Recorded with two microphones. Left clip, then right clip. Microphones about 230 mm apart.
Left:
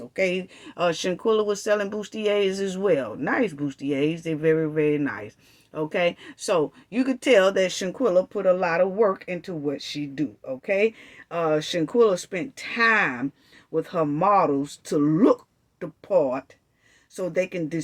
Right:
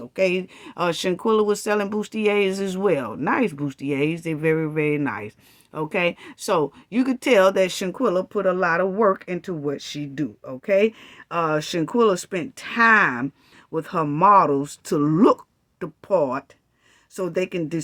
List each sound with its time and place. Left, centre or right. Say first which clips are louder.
0.2 s speech: right 3 dB; right